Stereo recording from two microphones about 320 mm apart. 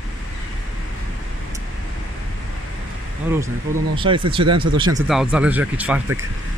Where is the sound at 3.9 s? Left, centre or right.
Centre.